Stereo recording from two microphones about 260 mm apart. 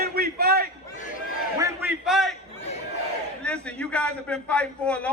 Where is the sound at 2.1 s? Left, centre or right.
Centre.